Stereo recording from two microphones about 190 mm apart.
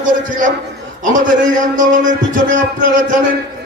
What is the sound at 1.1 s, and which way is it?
A man's voice, 45° right (ahead or behind).